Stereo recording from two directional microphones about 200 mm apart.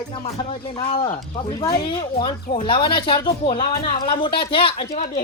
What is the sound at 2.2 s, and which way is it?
Speech, 25° left (ahead or behind).